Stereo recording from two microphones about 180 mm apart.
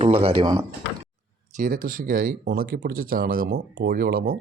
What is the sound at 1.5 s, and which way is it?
Speech, 50° right (ahead or behind).